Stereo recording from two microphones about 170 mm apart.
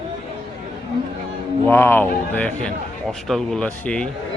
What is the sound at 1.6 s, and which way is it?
A man's voice, 15° left (ahead or behind).